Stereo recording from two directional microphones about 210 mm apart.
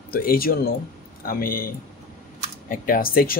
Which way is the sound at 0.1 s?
45° left (ahead or behind).